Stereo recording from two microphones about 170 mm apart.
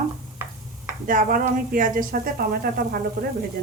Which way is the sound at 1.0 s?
50° right (ahead or behind).